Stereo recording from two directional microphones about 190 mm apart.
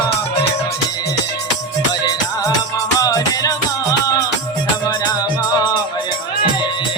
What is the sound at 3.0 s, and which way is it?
Music, 20° left (ahead or behind).